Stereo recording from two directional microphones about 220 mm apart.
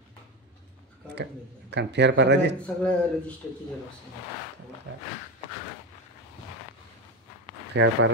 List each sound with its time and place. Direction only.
1.7 s speech: 50° right (ahead or behind)
2.6 s a man's voice: 5° left (ahead or behind)
7.7 s speech: 60° right (ahead or behind)